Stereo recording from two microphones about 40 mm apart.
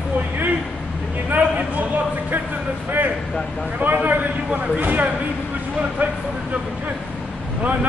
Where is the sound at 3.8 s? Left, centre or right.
Right.